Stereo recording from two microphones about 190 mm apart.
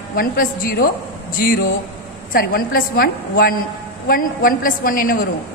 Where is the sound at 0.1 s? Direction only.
50° left (ahead or behind).